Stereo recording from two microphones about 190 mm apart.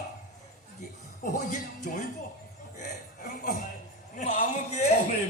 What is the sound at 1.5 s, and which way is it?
Speech, 40° left (ahead or behind).